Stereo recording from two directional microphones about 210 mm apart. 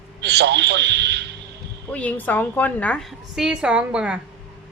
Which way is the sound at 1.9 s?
5° left (ahead or behind).